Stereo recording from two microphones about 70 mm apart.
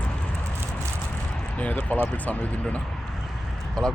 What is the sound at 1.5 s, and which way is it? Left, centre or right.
Speech, centre.